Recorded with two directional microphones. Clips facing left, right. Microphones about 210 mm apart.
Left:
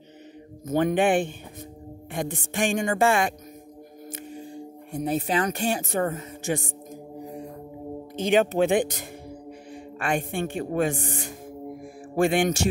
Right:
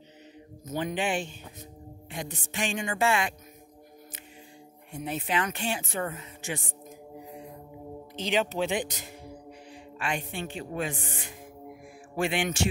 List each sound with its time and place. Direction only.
0.7 s speech: 55° left (ahead or behind)
4.1 s music: 40° left (ahead or behind)
4.9 s speech: 40° left (ahead or behind)
8.2 s speech: 50° left (ahead or behind)
11.8 s music: 45° left (ahead or behind)